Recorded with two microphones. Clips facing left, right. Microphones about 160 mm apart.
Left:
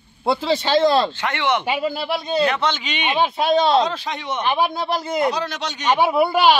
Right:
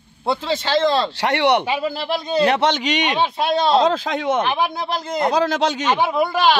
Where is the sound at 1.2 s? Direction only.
70° right (ahead or behind).